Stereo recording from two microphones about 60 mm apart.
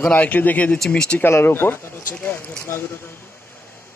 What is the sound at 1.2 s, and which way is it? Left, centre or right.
Speech, left.